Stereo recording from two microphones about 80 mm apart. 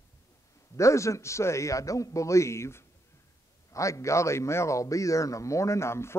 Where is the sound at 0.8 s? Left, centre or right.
Left.